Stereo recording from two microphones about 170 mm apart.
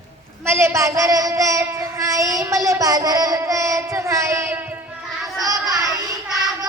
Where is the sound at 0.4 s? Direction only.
15° right (ahead or behind).